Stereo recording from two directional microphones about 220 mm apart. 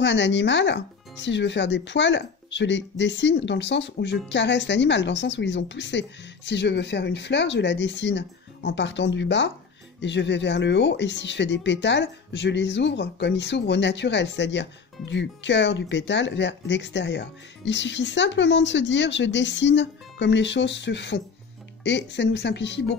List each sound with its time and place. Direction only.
0.0 s speech: 55° left (ahead or behind)